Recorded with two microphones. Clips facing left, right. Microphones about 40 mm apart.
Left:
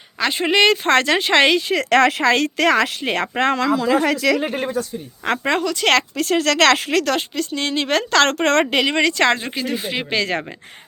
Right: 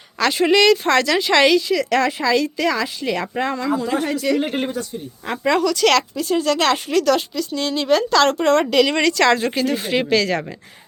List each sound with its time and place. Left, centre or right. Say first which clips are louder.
0.2 s speech: right 1 dB; left
5.4 s speech: right 6 dB; left
6.1 s a woman's voice: left 2 dB; left
8.7 s speech: right 2 dB; left
9.6 s speech: right 4 dB; centre
10.1 s speech: right 1 dB; left